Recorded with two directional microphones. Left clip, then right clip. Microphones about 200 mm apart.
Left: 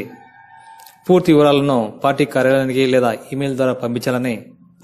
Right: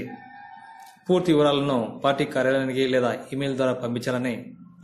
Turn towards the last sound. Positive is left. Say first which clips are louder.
# left 7 dB
turn(degrees=40)  # may be behind; listen again after turning